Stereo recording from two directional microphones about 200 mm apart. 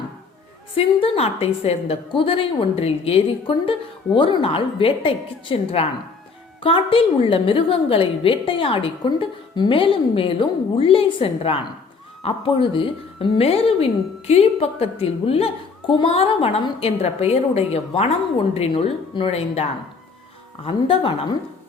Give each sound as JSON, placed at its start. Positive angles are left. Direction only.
{"t": 0.8, "sound": "a woman's voice", "side_deg": 30}
{"t": 20.7, "sound": "a woman's voice", "side_deg": 25}